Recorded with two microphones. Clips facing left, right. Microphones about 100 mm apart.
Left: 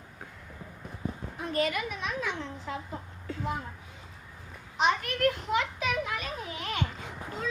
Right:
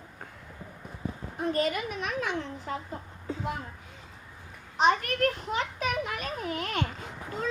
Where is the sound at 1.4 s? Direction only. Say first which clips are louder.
Right 2 dB; 35° right (ahead or behind).